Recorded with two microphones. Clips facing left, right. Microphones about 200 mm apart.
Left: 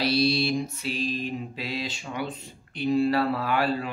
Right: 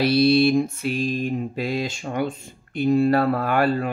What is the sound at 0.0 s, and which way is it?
Mantra, 55° right (ahead or behind).